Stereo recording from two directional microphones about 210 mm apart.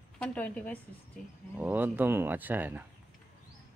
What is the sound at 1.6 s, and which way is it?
Speech, 10° right (ahead or behind).